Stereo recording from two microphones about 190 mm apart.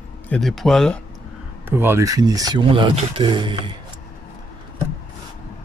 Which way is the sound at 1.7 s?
10° right (ahead or behind).